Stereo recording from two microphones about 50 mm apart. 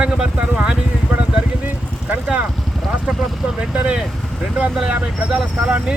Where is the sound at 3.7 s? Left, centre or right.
Right.